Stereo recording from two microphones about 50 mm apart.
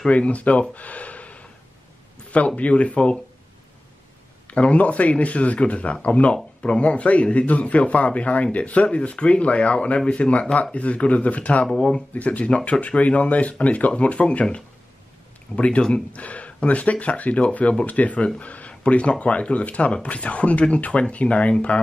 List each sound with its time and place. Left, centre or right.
0.1 s speech: left
4.5 s speech: left
6.3 s speech: centre
11.7 s speech: centre
12.1 s speech: left